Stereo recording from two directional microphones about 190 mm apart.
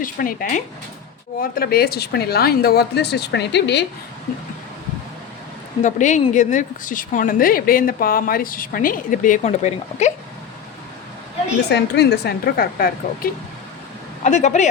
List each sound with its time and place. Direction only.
0.0 s a woman's voice: 50° left (ahead or behind)
5.8 s a woman's voice: 40° left (ahead or behind)
11.7 s a woman's voice: 60° left (ahead or behind)
14.3 s speech: 40° left (ahead or behind)